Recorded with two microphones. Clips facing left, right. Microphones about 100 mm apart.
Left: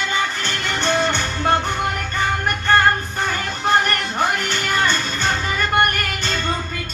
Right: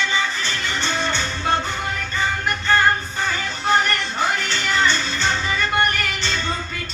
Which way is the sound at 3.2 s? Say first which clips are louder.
Left 3 dB; 55° left (ahead or behind).